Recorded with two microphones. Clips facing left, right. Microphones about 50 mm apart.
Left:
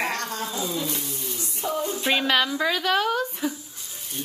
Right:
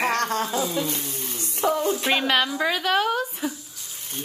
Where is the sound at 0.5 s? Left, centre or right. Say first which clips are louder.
Right 3 dB; right.